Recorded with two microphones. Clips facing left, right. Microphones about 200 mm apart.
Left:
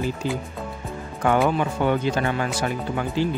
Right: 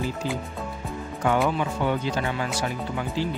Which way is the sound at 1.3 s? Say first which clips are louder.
Left 3 dB; 55° left (ahead or behind).